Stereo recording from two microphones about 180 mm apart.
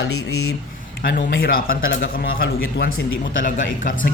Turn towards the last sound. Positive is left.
turn(degrees=50)  # may be behind; listen again after turning